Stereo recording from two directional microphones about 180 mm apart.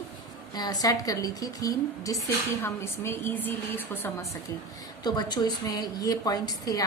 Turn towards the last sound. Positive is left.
turn(degrees=20)  # may be behind; listen again after turning